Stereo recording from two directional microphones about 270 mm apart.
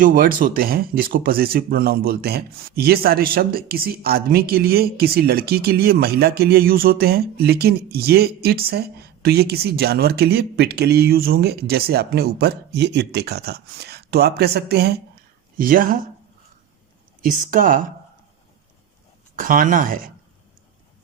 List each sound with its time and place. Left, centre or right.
0.0 s speech: right
17.2 s speech: right
19.4 s speech: right